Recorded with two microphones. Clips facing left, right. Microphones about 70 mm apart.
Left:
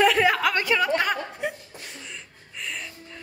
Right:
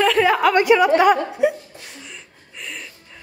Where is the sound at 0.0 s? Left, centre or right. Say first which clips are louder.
Right 4 dB; centre.